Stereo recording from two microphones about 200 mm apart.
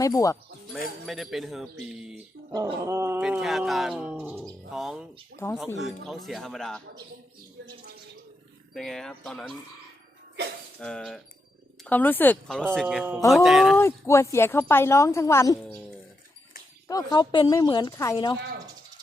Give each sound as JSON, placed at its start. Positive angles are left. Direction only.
{"t": 0.0, "sound": "speech", "side_deg": 15}
{"t": 1.0, "sound": "speech", "side_deg": 0}
{"t": 2.0, "sound": "a sound", "side_deg": -5}
{"t": 2.5, "sound": "speech", "side_deg": -20}
{"t": 5.4, "sound": "speech", "side_deg": 15}
{"t": 5.8, "sound": "speech", "side_deg": 0}
{"t": 8.7, "sound": "speech", "side_deg": 0}
{"t": 10.8, "sound": "speech", "side_deg": 5}
{"t": 13.7, "sound": "speech", "side_deg": 15}
{"t": 16.9, "sound": "speech", "side_deg": 20}